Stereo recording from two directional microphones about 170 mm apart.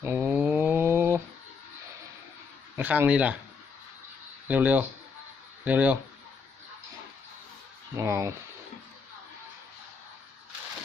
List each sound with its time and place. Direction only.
0.0 s a sound: 15° right (ahead or behind)
2.7 s speech: 10° right (ahead or behind)
4.4 s speech: 10° right (ahead or behind)
7.9 s speech: 15° right (ahead or behind)